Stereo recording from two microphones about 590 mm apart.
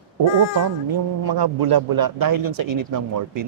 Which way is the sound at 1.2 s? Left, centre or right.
Right.